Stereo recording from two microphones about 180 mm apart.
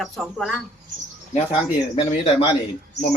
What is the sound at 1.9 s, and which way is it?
Speech, 30° left (ahead or behind).